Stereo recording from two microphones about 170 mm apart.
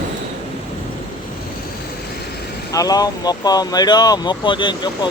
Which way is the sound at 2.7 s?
20° left (ahead or behind).